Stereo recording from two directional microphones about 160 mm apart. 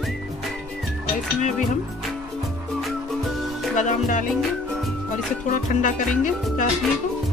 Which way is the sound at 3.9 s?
50° left (ahead or behind).